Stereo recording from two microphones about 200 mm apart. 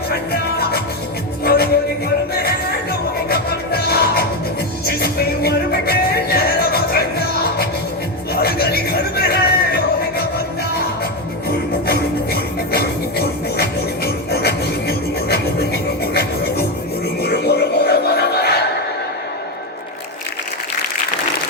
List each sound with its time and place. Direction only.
0.1 s music: 50° left (ahead or behind)
16.1 s didgeridoo: 50° left (ahead or behind)
17.2 s music: 55° left (ahead or behind)